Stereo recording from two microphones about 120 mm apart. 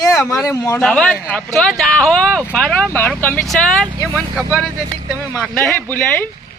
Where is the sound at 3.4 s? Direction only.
5° left (ahead or behind).